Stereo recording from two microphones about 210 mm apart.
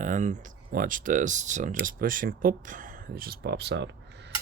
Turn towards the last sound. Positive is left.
turn(degrees=-55)  # may be behind; listen again after turning